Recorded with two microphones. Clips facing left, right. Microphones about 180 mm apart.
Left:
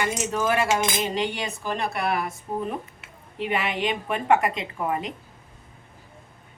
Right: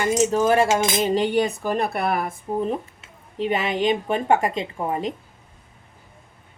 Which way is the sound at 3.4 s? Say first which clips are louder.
Right 4 dB; 40° right (ahead or behind).